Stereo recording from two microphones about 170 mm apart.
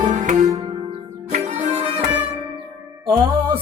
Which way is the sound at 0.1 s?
45° right (ahead or behind).